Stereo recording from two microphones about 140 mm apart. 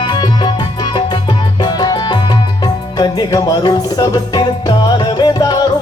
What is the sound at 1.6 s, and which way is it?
Music, 30° left (ahead or behind).